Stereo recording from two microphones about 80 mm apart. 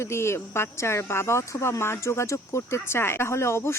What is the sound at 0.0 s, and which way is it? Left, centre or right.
Speech, left.